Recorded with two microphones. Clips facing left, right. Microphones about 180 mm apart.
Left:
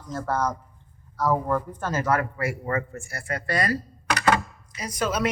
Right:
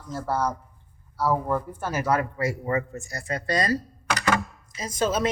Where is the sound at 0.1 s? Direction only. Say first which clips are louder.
Even; 10° right (ahead or behind).